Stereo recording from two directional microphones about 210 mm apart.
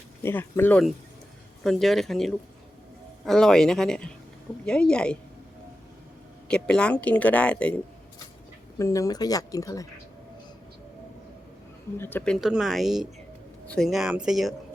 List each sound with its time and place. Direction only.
0.2 s speech: 10° left (ahead or behind)
6.5 s speech: 5° left (ahead or behind)
8.8 s speech: 15° left (ahead or behind)
11.9 s speech: 10° left (ahead or behind)